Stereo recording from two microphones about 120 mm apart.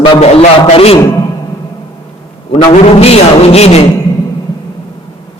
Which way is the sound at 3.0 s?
60° left (ahead or behind).